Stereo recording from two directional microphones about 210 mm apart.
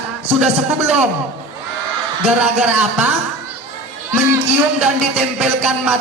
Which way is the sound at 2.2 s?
5° right (ahead or behind).